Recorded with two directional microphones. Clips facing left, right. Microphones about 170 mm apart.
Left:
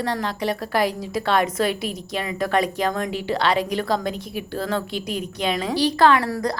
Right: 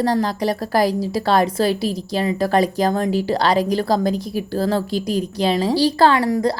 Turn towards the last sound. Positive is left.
turn(degrees=-25)  # may be behind; listen again after turning